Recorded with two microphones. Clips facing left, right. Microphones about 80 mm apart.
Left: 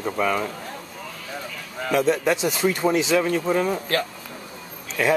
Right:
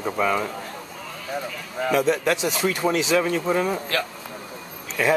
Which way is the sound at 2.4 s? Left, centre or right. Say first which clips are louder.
Left 1 dB; centre.